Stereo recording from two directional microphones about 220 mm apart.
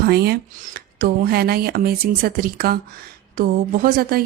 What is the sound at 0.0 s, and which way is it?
Speech, 45° right (ahead or behind).